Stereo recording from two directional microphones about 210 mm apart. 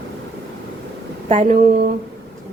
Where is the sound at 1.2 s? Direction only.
35° right (ahead or behind).